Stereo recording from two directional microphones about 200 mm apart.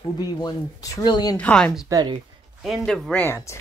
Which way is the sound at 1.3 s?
5° left (ahead or behind).